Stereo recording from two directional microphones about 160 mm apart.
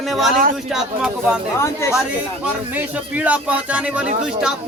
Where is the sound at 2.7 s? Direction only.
10° right (ahead or behind).